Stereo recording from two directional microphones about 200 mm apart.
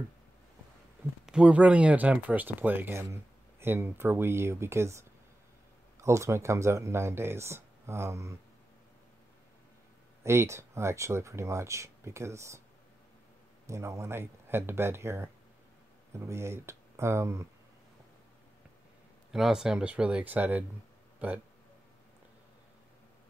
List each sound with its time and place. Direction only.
1.2 s speech: 5° right (ahead or behind)
10.2 s speech: 15° right (ahead or behind)
13.7 s speech: 15° right (ahead or behind)
19.3 s speech: centre (ahead or behind)